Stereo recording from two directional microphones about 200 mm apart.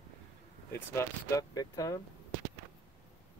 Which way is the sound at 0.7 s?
15° left (ahead or behind).